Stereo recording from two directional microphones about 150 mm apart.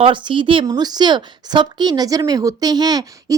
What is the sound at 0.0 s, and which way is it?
Speech, 35° right (ahead or behind).